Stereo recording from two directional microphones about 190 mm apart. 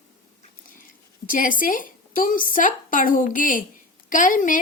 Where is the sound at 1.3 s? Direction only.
45° left (ahead or behind).